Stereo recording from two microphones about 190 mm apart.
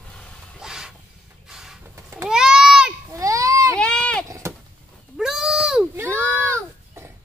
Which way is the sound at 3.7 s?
5° left (ahead or behind).